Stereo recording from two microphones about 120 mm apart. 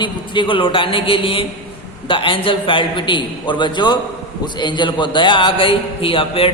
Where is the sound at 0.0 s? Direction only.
40° left (ahead or behind).